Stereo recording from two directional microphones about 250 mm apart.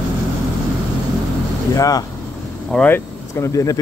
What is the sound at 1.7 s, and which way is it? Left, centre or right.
Speech, centre.